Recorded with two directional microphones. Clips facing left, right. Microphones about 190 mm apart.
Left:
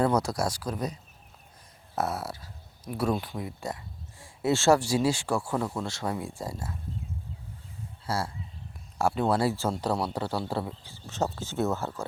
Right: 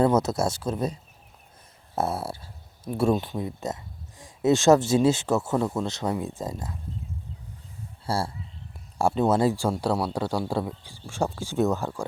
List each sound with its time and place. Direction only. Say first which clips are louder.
0.0 s speech: right 4 dB; 20° right (ahead or behind)
2.0 s speech: right 3 dB; 30° right (ahead or behind)
8.0 s speech: right 3 dB; 30° right (ahead or behind); by 12.0 s 15° right (ahead or behind)